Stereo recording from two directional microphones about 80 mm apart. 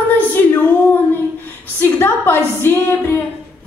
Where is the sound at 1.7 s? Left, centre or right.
Left.